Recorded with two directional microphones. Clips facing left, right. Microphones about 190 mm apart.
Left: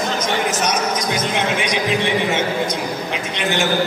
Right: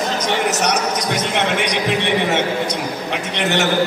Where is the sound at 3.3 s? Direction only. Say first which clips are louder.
Right 2 dB; 70° right (ahead or behind).